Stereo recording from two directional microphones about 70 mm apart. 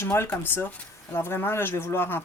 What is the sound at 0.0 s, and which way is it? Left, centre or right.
Speech, left.